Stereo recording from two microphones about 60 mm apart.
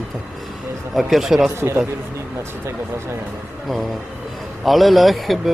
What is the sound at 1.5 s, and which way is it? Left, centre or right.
Speech, right.